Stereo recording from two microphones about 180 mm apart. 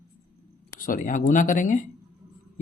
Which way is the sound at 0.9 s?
50° left (ahead or behind).